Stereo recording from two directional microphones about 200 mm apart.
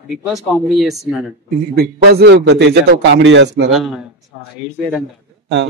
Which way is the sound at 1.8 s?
55° right (ahead or behind).